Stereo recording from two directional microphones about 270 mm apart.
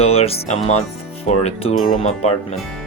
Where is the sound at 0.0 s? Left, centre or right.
Left.